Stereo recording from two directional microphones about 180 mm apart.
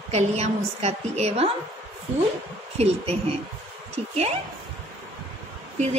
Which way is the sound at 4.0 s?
35° right (ahead or behind).